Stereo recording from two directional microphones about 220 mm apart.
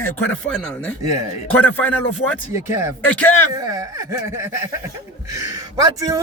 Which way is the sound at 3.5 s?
15° right (ahead or behind).